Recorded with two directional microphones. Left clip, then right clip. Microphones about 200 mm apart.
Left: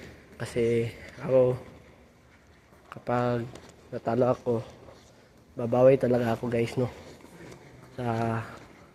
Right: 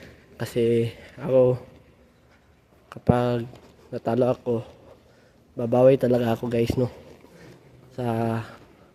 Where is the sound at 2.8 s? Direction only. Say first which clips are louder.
Right 5 dB; 45° right (ahead or behind).